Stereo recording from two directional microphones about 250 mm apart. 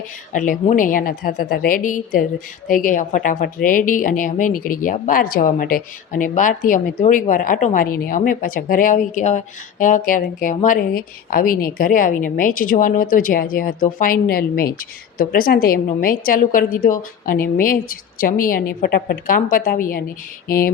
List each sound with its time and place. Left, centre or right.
0.3 s a woman's voice: left